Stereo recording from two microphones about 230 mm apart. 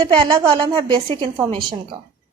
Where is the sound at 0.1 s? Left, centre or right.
Centre.